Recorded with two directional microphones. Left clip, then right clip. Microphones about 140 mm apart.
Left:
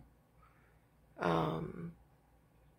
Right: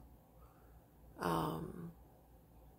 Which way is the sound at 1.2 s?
20° right (ahead or behind).